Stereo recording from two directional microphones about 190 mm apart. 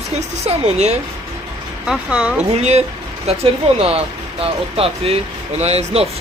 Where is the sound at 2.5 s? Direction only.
35° right (ahead or behind).